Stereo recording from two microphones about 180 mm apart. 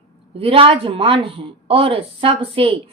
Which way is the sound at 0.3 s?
30° right (ahead or behind).